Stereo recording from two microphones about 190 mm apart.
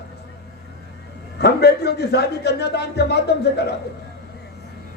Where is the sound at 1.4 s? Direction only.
60° left (ahead or behind).